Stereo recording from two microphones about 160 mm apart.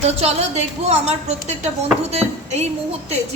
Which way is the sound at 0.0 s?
40° right (ahead or behind).